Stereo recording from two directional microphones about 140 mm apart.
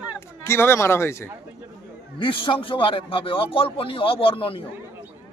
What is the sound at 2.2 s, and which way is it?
A man's voice, 40° left (ahead or behind).